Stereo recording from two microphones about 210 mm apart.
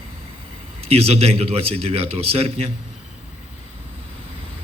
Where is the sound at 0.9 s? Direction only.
30° right (ahead or behind).